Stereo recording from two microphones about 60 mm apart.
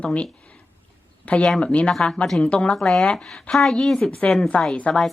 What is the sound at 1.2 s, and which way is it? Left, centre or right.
A woman's voice, left.